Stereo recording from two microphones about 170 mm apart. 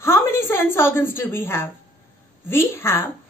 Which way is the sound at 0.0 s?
15° left (ahead or behind).